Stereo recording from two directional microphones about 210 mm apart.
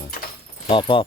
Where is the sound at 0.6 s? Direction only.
25° left (ahead or behind).